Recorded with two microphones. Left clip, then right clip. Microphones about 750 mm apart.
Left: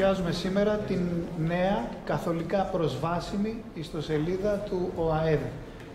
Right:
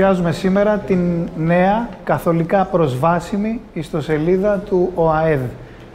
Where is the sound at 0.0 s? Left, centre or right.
Right.